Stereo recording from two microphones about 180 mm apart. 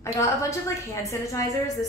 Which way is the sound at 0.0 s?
15° left (ahead or behind).